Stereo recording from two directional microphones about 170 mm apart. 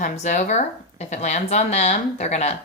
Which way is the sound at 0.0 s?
45° left (ahead or behind).